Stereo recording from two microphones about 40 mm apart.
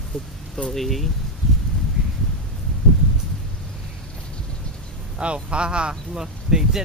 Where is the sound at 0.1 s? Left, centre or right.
Centre.